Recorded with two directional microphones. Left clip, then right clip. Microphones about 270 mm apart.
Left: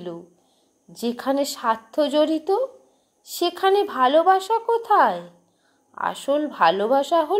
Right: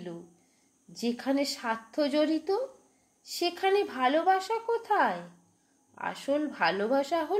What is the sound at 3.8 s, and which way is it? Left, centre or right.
Speech, left.